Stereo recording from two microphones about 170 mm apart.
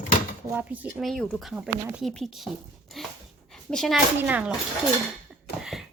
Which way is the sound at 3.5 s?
Centre (ahead or behind).